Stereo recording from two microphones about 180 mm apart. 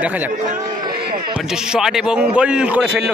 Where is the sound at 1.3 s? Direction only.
5° right (ahead or behind).